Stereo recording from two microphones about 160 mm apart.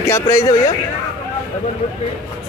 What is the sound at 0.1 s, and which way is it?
Speech, 20° left (ahead or behind).